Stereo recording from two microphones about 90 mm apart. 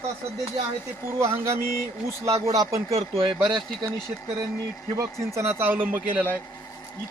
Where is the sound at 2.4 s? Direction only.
35° right (ahead or behind).